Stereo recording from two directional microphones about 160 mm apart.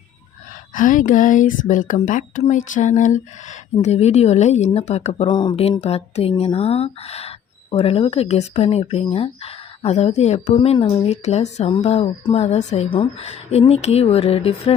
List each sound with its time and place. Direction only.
0.7 s speech: 55° left (ahead or behind); by 14.7 s 40° left (ahead or behind)